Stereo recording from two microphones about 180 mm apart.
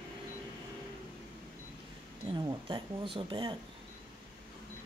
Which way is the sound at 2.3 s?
25° right (ahead or behind).